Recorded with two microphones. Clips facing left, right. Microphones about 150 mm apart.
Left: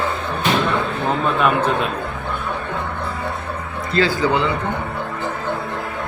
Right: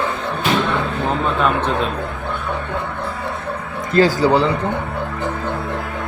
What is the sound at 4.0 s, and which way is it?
Speech, 40° right (ahead or behind).